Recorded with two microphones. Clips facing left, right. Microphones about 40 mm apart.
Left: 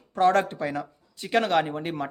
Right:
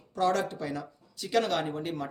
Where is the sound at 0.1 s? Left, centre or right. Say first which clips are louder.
Left 6 dB; left.